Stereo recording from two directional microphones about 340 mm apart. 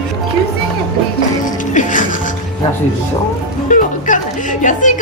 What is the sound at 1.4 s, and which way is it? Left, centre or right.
Music, left.